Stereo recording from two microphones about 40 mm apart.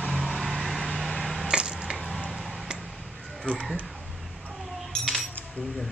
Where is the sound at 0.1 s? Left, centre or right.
Centre.